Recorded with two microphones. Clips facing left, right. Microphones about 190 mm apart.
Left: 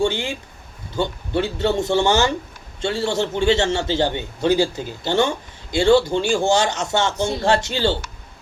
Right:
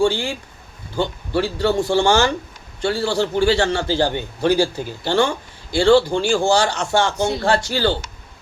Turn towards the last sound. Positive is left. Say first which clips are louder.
# even
turn(degrees=25)  # may be behind; listen again after turning